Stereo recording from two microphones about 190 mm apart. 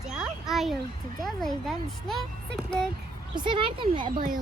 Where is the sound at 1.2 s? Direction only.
Centre (ahead or behind).